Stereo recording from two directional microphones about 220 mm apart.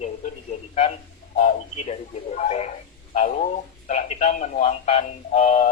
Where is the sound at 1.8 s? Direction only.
30° left (ahead or behind).